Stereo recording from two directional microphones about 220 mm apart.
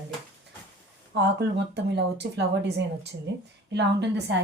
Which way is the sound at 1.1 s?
50° right (ahead or behind).